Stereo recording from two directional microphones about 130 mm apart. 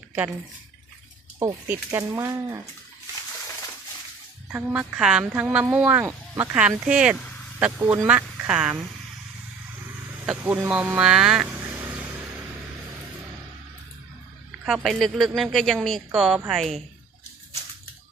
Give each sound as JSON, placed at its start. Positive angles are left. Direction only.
{"t": 1.6, "sound": "speech", "side_deg": -15}
{"t": 4.5, "sound": "speech", "side_deg": -10}
{"t": 10.2, "sound": "speech", "side_deg": -15}
{"t": 11.4, "sound": "vehicle", "side_deg": -15}
{"t": 14.6, "sound": "a woman's voice", "side_deg": -5}